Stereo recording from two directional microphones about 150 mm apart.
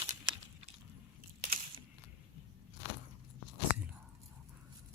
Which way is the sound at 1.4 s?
70° right (ahead or behind).